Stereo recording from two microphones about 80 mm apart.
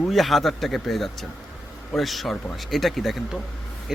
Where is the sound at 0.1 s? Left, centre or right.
Centre.